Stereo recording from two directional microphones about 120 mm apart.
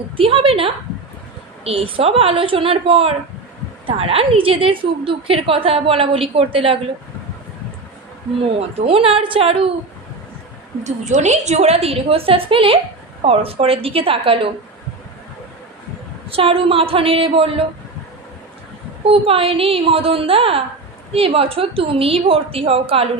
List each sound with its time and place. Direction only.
0.2 s a woman's voice: 50° right (ahead or behind)
8.4 s a woman's voice: 55° right (ahead or behind)
10.8 s a woman's voice: 85° right; by 14.5 s 50° right (ahead or behind)
16.3 s a woman's voice: 50° right (ahead or behind)
19.0 s a woman's voice: 50° right (ahead or behind)